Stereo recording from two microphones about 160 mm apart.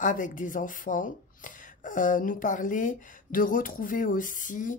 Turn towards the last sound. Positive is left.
turn(degrees=55)  # may be behind; listen again after turning